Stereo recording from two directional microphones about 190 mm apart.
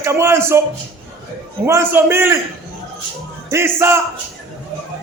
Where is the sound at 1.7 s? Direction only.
15° right (ahead or behind).